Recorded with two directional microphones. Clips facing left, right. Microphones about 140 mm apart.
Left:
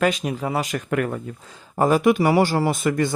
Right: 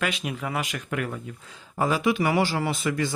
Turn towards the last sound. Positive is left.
turn(degrees=50)  # may be behind; listen again after turning